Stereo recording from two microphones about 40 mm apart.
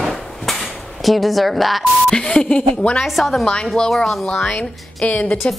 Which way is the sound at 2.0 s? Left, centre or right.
Left.